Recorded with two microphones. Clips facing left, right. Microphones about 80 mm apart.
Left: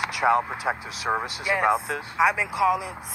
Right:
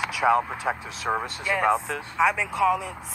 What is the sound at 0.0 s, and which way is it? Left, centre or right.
Speech, centre.